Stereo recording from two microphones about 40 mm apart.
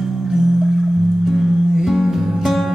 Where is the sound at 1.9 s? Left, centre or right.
Centre.